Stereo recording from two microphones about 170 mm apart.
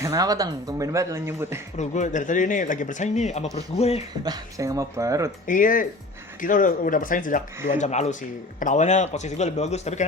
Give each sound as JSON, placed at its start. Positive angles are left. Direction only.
{"t": 0.0, "sound": "speech", "side_deg": -20}
{"t": 1.8, "sound": "speech", "side_deg": 45}
{"t": 4.2, "sound": "speech", "side_deg": -20}
{"t": 5.5, "sound": "speech", "side_deg": 50}